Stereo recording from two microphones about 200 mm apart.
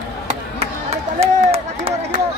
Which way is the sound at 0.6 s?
30° right (ahead or behind).